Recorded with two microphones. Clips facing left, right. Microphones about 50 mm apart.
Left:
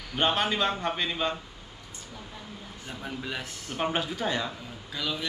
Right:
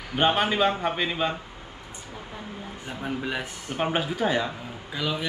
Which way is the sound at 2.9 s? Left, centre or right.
Centre.